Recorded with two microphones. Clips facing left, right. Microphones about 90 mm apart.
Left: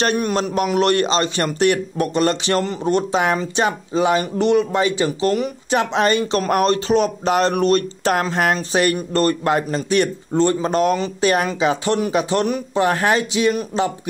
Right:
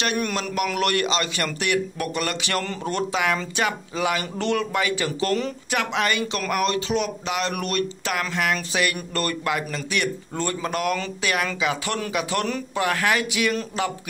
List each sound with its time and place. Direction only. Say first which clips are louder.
0.2 s speech: left 5 dB; 25° left (ahead or behind)
5.8 s speech: left 6 dB; 30° left (ahead or behind)
12.7 s speech: left 5 dB; 35° left (ahead or behind)